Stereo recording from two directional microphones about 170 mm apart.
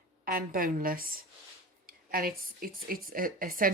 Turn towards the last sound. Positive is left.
turn(degrees=-55)  # may be behind; listen again after turning